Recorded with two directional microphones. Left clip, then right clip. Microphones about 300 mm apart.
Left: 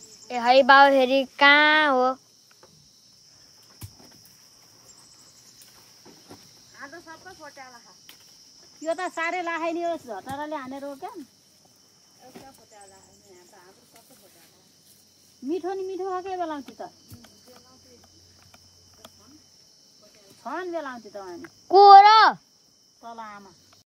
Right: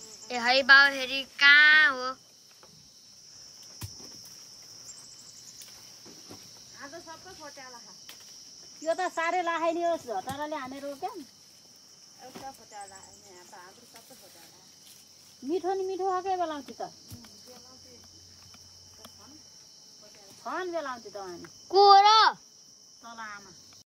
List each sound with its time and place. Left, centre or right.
0.3 s speech: centre
6.8 s cricket: centre
8.7 s a child's voice: left
15.5 s a child's voice: left
20.4 s a child's voice: left; by 23.4 s centre